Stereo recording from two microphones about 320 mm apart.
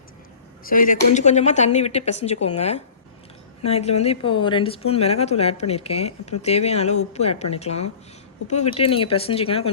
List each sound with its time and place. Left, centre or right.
0.6 s speech: left